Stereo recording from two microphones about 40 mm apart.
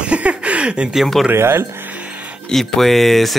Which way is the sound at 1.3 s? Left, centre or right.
Right.